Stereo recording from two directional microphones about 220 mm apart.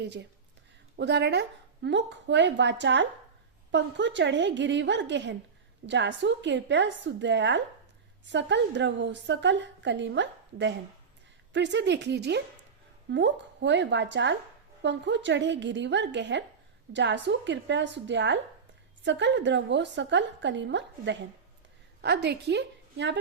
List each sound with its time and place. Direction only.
0.0 s a woman's voice: 50° right (ahead or behind)